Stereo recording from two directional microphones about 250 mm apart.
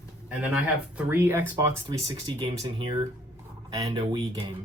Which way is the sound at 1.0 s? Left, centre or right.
Centre.